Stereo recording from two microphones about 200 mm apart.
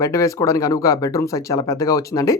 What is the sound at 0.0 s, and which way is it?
Speech, 15° left (ahead or behind).